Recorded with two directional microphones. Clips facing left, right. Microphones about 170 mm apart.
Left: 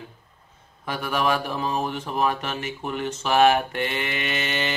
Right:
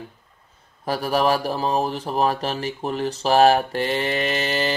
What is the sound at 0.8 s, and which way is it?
Speech, 35° right (ahead or behind).